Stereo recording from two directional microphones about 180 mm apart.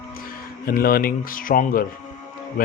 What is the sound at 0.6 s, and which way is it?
Speech, 55° left (ahead or behind).